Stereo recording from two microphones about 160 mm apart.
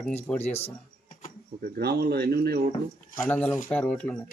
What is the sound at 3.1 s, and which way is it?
Speech, 10° left (ahead or behind).